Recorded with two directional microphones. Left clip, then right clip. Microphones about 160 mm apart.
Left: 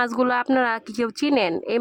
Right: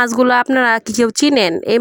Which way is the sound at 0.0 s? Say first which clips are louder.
Right 8 dB; 30° right (ahead or behind).